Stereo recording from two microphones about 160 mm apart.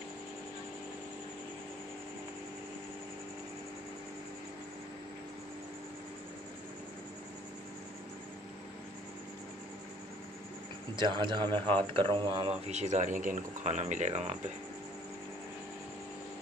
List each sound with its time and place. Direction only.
11.0 s speech: 30° right (ahead or behind)
12.6 s speech: 45° right (ahead or behind)